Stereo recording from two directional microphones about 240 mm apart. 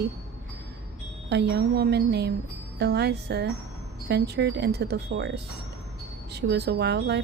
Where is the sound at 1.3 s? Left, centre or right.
Right.